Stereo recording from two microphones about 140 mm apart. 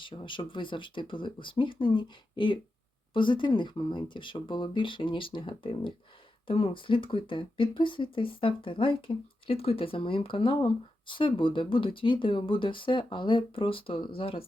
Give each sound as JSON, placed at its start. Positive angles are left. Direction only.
{"t": 0.0, "sound": "speech", "side_deg": 35}